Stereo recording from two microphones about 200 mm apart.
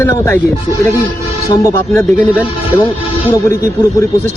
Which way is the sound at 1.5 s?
15° left (ahead or behind).